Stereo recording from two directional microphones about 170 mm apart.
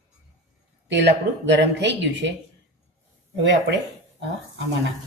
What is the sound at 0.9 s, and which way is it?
A woman's voice, 90° right.